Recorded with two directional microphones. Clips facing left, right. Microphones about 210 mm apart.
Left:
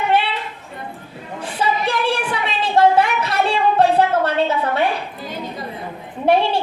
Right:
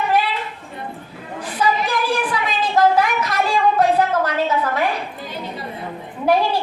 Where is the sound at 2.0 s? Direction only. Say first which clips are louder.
Even; 30° left (ahead or behind).